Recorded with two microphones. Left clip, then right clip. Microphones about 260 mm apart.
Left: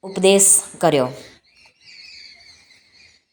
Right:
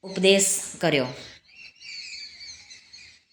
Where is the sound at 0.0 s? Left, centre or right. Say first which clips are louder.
Left 5 dB; centre.